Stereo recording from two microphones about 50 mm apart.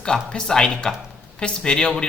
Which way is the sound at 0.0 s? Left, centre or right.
Centre.